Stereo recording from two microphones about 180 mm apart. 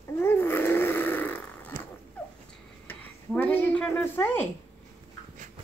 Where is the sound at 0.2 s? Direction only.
10° left (ahead or behind).